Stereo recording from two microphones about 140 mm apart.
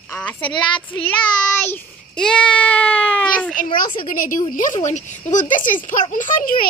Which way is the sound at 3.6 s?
75° left (ahead or behind).